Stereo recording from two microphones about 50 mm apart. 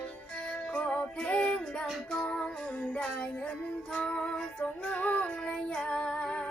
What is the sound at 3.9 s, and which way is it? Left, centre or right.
Female singing, centre.